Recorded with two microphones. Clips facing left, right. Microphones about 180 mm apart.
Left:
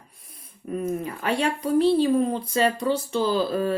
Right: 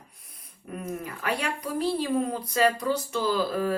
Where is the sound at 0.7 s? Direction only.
25° left (ahead or behind).